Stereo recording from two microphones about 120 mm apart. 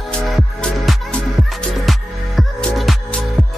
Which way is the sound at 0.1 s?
5° left (ahead or behind).